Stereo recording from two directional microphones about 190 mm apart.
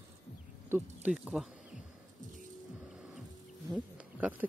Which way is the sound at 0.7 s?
5° right (ahead or behind).